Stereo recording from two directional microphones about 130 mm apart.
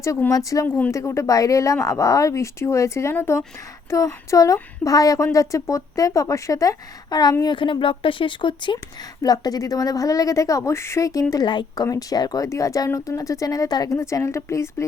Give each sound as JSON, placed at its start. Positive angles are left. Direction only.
{"t": 0.0, "sound": "speech", "side_deg": 25}